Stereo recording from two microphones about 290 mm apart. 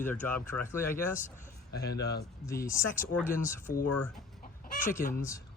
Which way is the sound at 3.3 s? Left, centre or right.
Left.